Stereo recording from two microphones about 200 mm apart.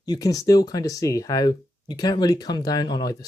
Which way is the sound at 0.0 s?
20° left (ahead or behind).